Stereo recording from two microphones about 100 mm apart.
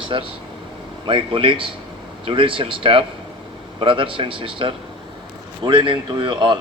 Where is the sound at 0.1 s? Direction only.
45° right (ahead or behind).